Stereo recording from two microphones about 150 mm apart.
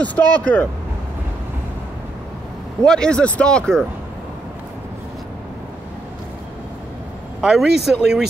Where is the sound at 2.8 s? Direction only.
5° left (ahead or behind).